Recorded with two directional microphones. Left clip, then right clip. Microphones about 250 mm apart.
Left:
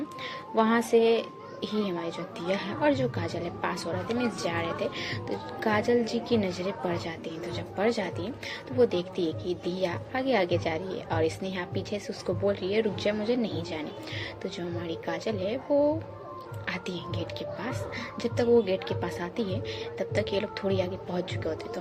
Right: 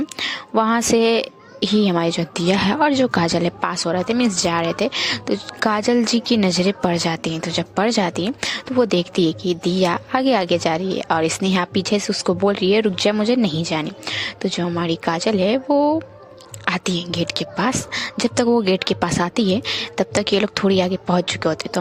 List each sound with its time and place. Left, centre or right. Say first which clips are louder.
0.2 s a woman's voice: right 7 dB; right